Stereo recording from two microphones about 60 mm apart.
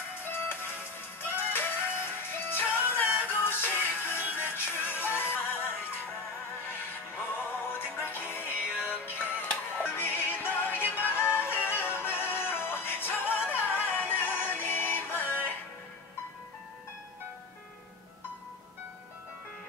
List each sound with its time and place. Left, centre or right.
0.2 s music: left
7.8 s music: left
13.4 s music: right
13.9 s music: left